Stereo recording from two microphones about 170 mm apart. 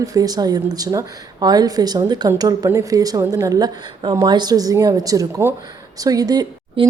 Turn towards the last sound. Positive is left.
turn(degrees=-25)  # may be behind; listen again after turning